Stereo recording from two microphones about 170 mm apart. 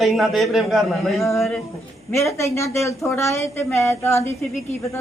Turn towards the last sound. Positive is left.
turn(degrees=15)  # may be behind; listen again after turning